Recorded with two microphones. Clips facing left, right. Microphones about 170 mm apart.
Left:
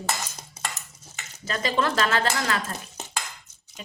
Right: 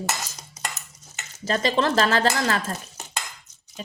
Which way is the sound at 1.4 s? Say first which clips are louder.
Right 3 dB; 35° right (ahead or behind).